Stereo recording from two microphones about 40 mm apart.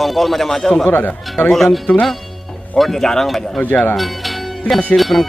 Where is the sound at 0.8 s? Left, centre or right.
Left.